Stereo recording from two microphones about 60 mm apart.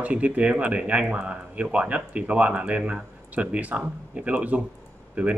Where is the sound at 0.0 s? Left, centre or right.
Right.